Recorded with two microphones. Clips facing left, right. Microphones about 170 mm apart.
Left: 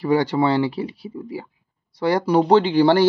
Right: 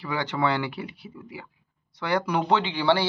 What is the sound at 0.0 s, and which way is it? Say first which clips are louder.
Speech: left 8 dB; 40° left (ahead or behind).